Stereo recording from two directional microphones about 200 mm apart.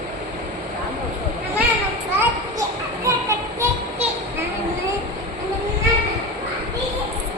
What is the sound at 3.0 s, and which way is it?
Children playing, 15° right (ahead or behind).